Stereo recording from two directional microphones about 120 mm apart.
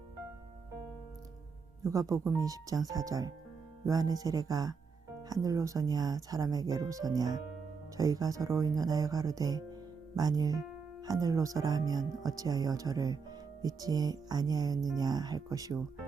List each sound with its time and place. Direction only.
1.8 s speech: 30° right (ahead or behind)